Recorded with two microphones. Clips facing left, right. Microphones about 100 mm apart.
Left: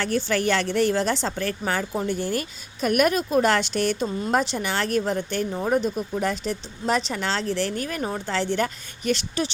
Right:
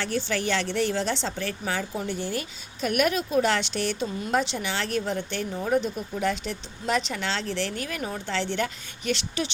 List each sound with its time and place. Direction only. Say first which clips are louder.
0.0 s a woman's voice: left 4 dB; 50° left (ahead or behind)